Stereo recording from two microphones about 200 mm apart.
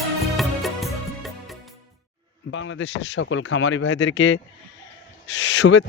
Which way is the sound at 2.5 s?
70° left (ahead or behind).